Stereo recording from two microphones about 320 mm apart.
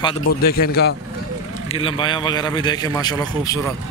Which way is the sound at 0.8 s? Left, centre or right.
Left.